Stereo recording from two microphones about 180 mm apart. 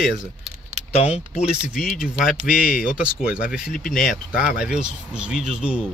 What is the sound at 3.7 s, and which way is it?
Speech, 50° left (ahead or behind).